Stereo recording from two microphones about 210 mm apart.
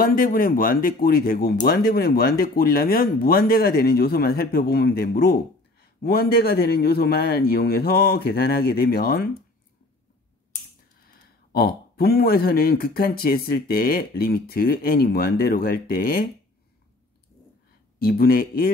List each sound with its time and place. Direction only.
0.0 s speech: 45° left (ahead or behind)
11.5 s speech: 50° left (ahead or behind)
17.9 s speech: 45° left (ahead or behind)